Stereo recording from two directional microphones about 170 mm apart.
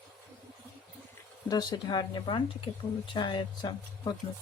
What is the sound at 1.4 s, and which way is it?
Speech, 25° left (ahead or behind).